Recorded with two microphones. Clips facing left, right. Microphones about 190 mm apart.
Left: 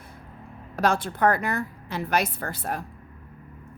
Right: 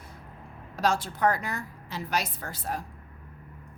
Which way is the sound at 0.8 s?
55° left (ahead or behind).